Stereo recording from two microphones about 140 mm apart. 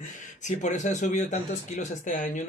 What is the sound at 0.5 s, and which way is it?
Speech, 60° left (ahead or behind).